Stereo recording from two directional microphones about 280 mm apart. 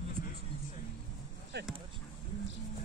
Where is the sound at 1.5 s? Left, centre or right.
Right.